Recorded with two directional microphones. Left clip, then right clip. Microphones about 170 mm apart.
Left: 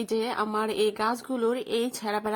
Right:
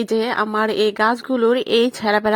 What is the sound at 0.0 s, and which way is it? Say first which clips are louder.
Speech: right 8 dB; 25° right (ahead or behind).